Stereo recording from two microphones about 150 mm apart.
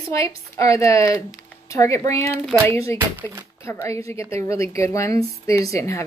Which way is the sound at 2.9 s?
10° right (ahead or behind).